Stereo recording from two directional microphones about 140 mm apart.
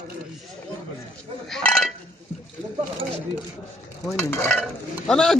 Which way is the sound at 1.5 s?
5° left (ahead or behind).